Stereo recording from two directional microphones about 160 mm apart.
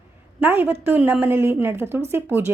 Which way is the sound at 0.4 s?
15° right (ahead or behind).